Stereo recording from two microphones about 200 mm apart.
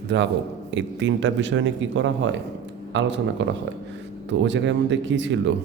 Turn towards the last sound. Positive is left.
turn(degrees=-65)  # may be behind; listen again after turning